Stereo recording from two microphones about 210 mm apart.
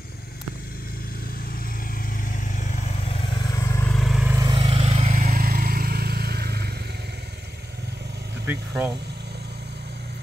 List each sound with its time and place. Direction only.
2.2 s vehicle: 40° left (ahead or behind); by 4.4 s 5° right (ahead or behind)
4.4 s vehicle: 20° right (ahead or behind); by 6.7 s 50° right (ahead or behind)
8.5 s vehicle: 10° right (ahead or behind)